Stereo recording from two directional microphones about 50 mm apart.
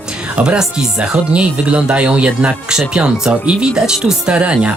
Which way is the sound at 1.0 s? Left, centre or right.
Right.